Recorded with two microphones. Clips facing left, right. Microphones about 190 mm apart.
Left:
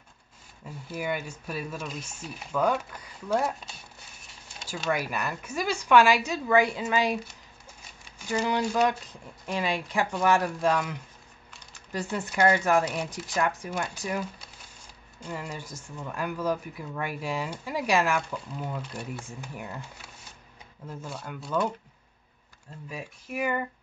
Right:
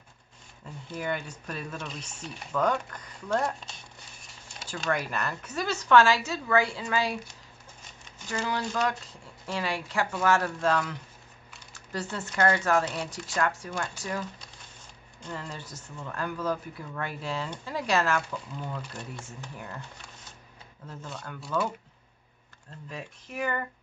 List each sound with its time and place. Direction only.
0.7 s speech: 5° left (ahead or behind)
8.3 s speech: 15° left (ahead or behind)
22.8 s speech: 10° left (ahead or behind)